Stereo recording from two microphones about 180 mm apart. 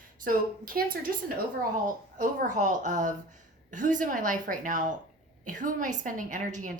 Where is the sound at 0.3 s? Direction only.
50° right (ahead or behind).